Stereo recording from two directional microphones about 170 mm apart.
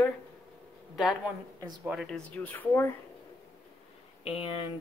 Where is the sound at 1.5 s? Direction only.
25° right (ahead or behind).